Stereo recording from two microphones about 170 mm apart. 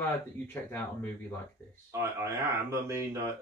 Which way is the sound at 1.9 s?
15° right (ahead or behind).